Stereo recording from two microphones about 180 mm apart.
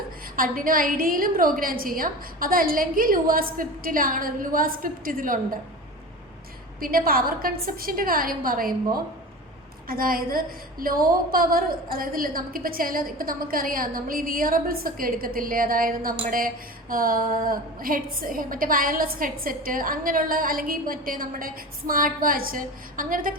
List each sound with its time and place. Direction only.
0.3 s a woman's voice: 50° right (ahead or behind)
6.7 s a woman's voice: 55° right (ahead or behind)
9.8 s a woman's voice: 55° right (ahead or behind)